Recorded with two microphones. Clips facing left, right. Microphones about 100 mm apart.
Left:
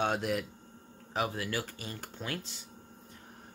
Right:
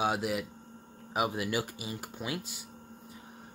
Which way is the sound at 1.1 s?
15° right (ahead or behind).